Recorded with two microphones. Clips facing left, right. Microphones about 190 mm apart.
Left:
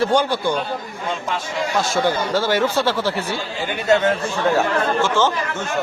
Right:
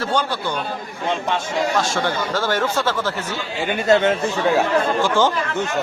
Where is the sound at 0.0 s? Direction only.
10° left (ahead or behind).